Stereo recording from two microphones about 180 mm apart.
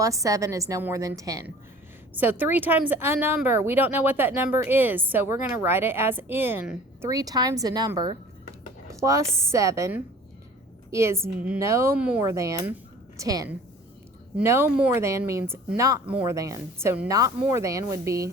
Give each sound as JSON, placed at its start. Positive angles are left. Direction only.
{"t": 0.0, "sound": "speech", "side_deg": -20}